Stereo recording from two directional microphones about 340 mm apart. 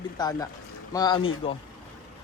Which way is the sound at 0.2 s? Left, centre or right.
Centre.